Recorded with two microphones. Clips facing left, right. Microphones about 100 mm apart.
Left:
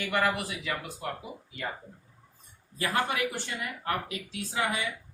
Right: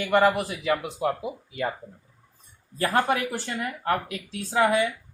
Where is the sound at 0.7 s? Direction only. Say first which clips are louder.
Right 12 dB; 85° right.